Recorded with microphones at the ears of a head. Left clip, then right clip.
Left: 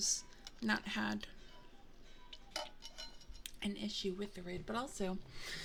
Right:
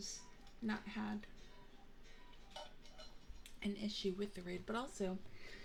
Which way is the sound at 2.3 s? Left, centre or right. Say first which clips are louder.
Left 9 dB; left.